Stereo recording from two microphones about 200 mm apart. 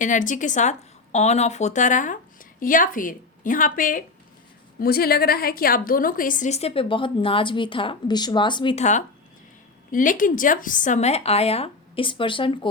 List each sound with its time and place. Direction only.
0.0 s a woman's voice: 40° left (ahead or behind)